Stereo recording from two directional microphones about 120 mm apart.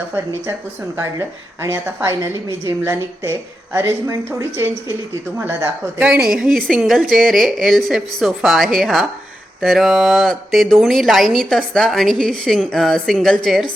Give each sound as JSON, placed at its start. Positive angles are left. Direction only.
{"t": 1.6, "sound": "a woman's voice", "side_deg": -25}
{"t": 6.0, "sound": "speech", "side_deg": -10}